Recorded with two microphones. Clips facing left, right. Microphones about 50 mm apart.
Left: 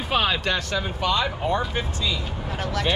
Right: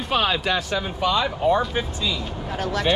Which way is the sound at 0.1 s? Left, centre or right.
Centre.